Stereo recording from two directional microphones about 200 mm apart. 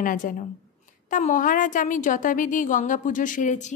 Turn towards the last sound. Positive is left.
turn(degrees=40)  # may be behind; listen again after turning